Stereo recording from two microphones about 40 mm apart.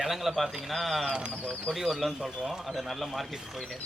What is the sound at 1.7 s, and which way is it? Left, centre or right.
Speech, centre.